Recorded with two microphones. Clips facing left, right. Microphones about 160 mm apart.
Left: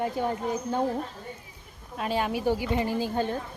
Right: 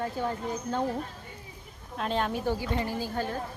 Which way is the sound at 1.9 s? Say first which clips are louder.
Left 1 dB; 5° left (ahead or behind).